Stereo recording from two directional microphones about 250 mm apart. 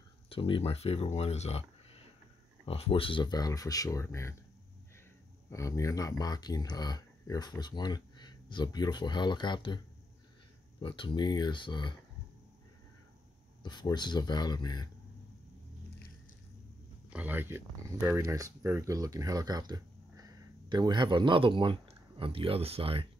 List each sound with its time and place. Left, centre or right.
0.3 s speech: left
5.5 s speech: centre
10.8 s speech: centre
13.6 s speech: centre
17.1 s speech: centre; by 23.0 s right